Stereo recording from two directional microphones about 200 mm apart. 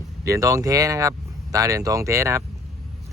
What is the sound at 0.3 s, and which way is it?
Speech, 15° right (ahead or behind).